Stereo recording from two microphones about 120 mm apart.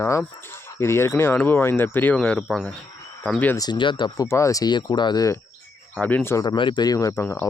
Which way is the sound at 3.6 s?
40° left (ahead or behind).